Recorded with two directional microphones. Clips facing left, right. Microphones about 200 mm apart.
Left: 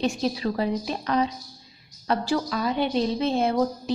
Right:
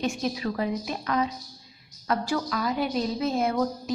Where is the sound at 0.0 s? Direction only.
30° left (ahead or behind).